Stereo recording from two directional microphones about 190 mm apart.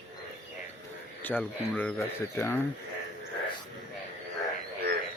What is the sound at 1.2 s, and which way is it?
Speech, 10° left (ahead or behind).